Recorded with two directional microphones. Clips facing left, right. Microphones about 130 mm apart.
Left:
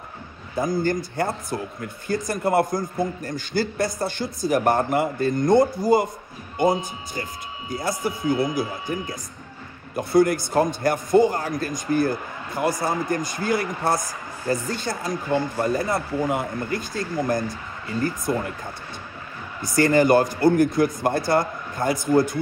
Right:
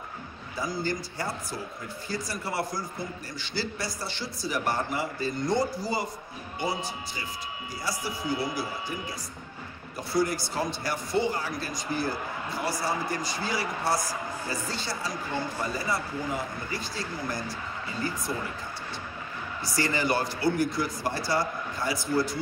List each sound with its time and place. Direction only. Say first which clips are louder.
0.6 s a man's voice: left 8 dB; 50° left (ahead or behind)
9.9 s a man's voice: left 9 dB; 55° left (ahead or behind)
19.6 s a man's voice: left 11 dB; 50° left (ahead or behind)